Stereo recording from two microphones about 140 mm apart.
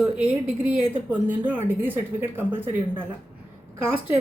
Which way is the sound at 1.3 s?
15° right (ahead or behind).